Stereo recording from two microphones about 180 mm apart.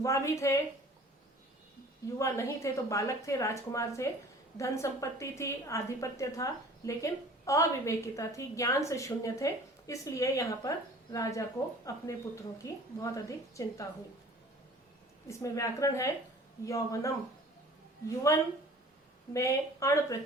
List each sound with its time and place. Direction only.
0.0 s a woman's voice: 15° left (ahead or behind)
2.1 s a woman's voice: 15° left (ahead or behind)
15.3 s a woman's voice: 15° left (ahead or behind)
18.3 s a woman's voice: 15° left (ahead or behind)